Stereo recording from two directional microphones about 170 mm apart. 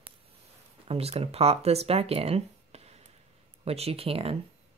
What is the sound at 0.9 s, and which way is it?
Speech, 35° right (ahead or behind).